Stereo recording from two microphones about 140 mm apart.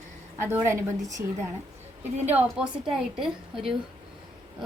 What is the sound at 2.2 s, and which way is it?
A woman's voice, 15° right (ahead or behind).